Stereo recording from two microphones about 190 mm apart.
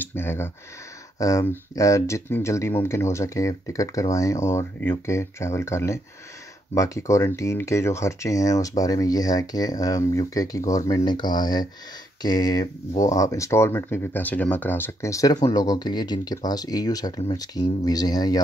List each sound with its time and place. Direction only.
0.1 s speech: 10° left (ahead or behind)